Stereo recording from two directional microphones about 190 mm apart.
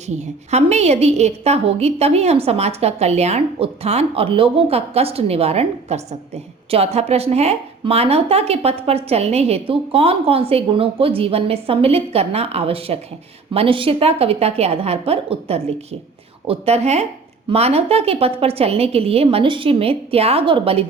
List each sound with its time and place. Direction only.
0.1 s a woman's voice: 35° right (ahead or behind)